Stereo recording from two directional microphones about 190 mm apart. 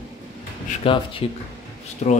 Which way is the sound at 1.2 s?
30° left (ahead or behind).